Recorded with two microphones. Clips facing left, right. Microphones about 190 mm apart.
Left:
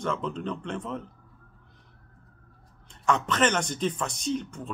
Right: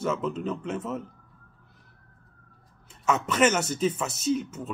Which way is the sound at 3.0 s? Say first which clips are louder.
Right 2 dB; 5° right (ahead or behind).